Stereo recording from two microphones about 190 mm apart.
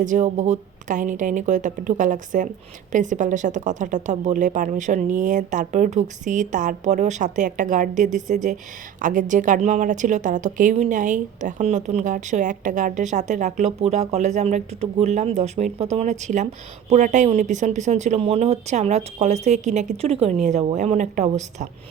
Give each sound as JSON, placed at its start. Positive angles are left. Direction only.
{"t": 0.0, "sound": "a woman's voice", "side_deg": -40}